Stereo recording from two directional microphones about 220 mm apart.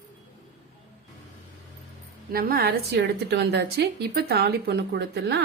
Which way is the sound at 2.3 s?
45° right (ahead or behind).